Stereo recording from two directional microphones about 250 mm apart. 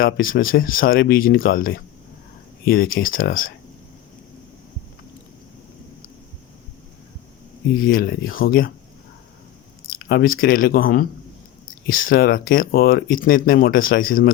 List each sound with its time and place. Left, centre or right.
0.0 s speech: left
7.8 s speech: left
9.9 s speech: left